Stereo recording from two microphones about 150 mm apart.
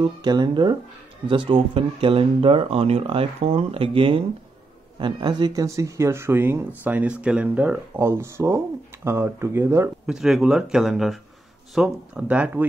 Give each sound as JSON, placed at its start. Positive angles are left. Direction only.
{"t": 0.0, "sound": "a man's voice", "side_deg": -30}
{"t": 10.0, "sound": "speech", "side_deg": -5}